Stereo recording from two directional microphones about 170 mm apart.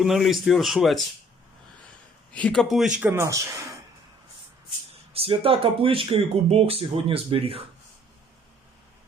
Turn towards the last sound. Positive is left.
turn(degrees=-35)  # may be behind; listen again after turning